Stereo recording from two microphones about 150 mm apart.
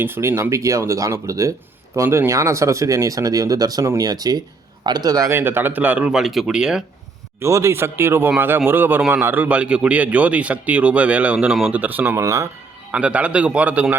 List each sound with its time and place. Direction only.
0.0 s a man's voice: 15° right (ahead or behind)
7.3 s a man's voice: 20° right (ahead or behind)
12.9 s a man's voice: 10° right (ahead or behind)